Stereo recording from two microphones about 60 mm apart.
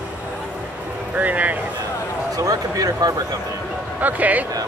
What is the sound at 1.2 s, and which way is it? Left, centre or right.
Speech, right.